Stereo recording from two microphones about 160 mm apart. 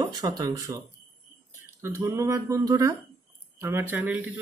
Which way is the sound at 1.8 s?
20° right (ahead or behind).